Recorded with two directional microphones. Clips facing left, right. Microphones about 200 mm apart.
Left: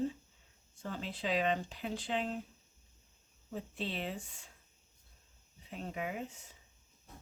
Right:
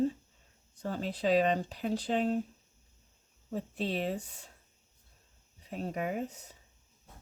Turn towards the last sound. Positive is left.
turn(degrees=-40)  # may be behind; listen again after turning